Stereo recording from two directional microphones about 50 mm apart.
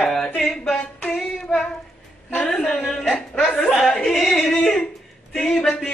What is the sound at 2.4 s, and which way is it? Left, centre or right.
Speech, centre.